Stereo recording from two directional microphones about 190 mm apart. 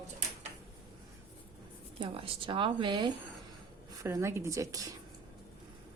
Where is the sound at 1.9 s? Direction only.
30° right (ahead or behind).